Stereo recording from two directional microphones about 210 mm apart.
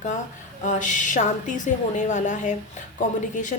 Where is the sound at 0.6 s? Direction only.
35° left (ahead or behind).